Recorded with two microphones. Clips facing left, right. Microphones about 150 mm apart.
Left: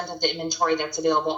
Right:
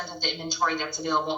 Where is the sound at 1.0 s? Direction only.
50° left (ahead or behind).